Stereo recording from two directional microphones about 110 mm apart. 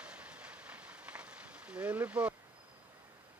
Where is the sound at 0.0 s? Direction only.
10° right (ahead or behind).